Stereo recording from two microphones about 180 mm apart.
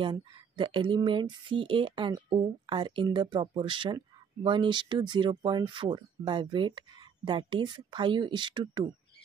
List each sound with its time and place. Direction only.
0.0 s speech: 25° right (ahead or behind)